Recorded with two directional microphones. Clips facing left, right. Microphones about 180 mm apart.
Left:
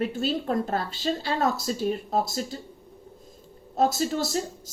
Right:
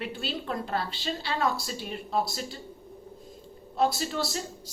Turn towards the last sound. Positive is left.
turn(degrees=45)  # may be behind; listen again after turning